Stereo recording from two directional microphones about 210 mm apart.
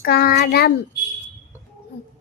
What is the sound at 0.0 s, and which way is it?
Child singing, 45° left (ahead or behind).